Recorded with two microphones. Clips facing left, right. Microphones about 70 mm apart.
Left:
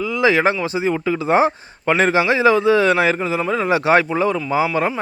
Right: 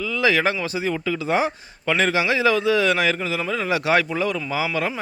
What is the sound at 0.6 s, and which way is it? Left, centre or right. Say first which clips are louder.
A man's voice: left 5 dB; left.